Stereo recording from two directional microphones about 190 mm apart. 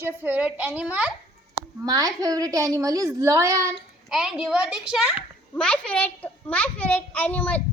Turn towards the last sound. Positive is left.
turn(degrees=10)  # may be behind; listen again after turning